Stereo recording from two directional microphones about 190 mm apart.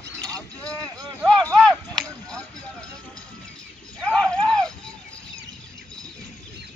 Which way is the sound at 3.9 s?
5° left (ahead or behind).